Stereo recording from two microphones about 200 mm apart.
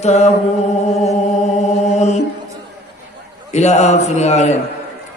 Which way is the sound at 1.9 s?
35° left (ahead or behind).